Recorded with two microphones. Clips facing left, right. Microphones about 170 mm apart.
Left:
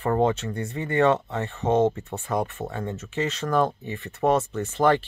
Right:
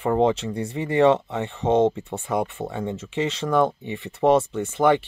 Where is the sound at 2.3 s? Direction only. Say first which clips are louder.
Right 2 dB; 10° right (ahead or behind).